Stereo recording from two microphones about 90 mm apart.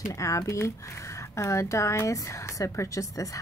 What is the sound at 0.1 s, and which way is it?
Speech, 35° left (ahead or behind).